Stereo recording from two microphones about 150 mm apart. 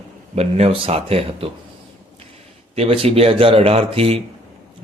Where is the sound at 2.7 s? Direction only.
40° right (ahead or behind).